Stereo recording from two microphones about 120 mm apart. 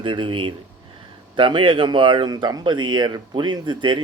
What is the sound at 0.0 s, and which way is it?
A man's voice, 45° right (ahead or behind).